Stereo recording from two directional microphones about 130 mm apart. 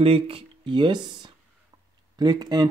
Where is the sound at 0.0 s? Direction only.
45° right (ahead or behind).